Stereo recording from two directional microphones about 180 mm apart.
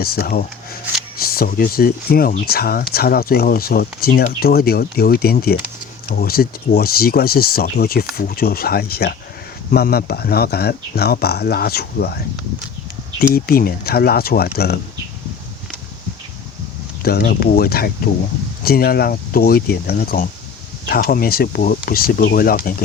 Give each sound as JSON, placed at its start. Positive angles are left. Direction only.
{"t": 0.0, "sound": "speech", "side_deg": 55}
{"t": 17.0, "sound": "speech", "side_deg": 55}